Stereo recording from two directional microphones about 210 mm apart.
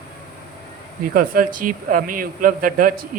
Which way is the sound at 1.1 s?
40° right (ahead or behind).